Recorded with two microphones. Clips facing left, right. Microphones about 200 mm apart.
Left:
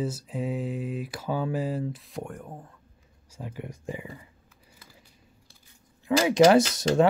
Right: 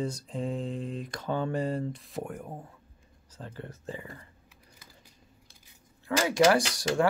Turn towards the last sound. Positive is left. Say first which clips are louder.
# left 5 dB
turn(degrees=20)  # may be behind; listen again after turning